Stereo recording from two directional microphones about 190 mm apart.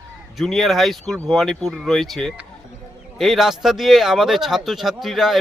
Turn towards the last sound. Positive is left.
turn(degrees=0)  # may be behind; listen again after turning